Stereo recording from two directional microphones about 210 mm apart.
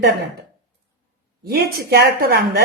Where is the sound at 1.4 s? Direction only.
50° right (ahead or behind).